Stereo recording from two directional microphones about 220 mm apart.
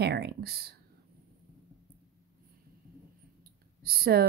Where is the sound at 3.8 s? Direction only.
45° right (ahead or behind).